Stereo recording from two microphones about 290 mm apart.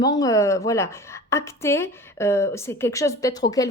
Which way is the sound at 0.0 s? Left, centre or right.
Centre.